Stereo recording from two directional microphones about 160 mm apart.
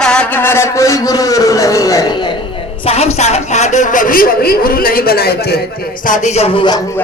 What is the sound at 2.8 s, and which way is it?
A man's voice, 40° left (ahead or behind).